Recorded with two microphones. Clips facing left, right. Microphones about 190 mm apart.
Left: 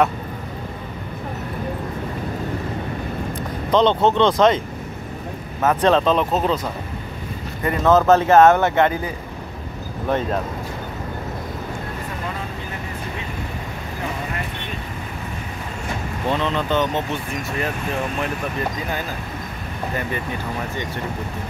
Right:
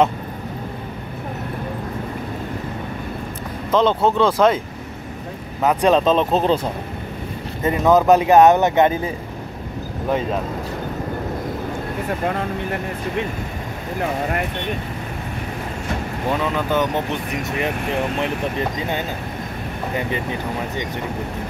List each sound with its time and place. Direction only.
3.7 s speech: 5° right (ahead or behind)
5.6 s speech: 15° right (ahead or behind)
6.3 s speech: 30° right (ahead or behind)
7.6 s speech: 15° right (ahead or behind)
10.0 s speech: 5° right (ahead or behind)
16.3 s speech: 10° right (ahead or behind)